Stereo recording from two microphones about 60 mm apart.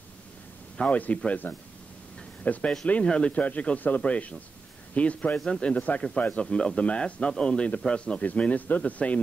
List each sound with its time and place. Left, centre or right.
0.7 s speech: left
6.4 s a man's voice: centre